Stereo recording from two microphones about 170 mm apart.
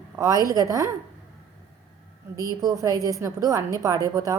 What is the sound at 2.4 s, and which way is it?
A woman's voice, 20° right (ahead or behind).